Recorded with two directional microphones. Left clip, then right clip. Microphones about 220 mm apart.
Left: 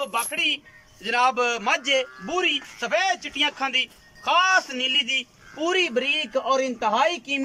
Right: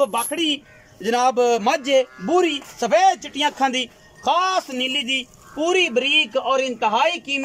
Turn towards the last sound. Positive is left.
turn(degrees=0)  # may be behind; listen again after turning